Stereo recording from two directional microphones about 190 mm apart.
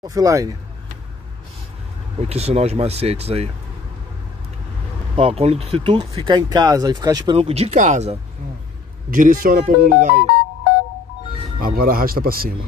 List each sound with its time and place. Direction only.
0.0 s speech: 20° right (ahead or behind)
2.2 s speech: 35° right (ahead or behind)
5.1 s speech: 30° right (ahead or behind)
7.3 s speech: 30° right (ahead or behind)
11.6 s speech: 50° right (ahead or behind)